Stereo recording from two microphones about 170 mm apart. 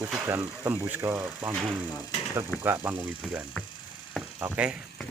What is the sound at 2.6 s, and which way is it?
Speech, 10° right (ahead or behind).